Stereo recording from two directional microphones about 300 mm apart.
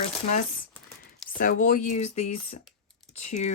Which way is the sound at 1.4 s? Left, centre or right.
Left.